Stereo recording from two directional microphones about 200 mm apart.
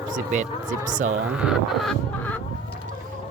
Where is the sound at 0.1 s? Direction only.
40° right (ahead or behind).